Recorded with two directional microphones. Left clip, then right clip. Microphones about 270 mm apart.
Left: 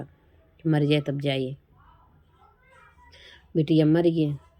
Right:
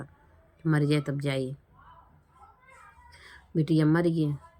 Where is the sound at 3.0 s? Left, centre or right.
Centre.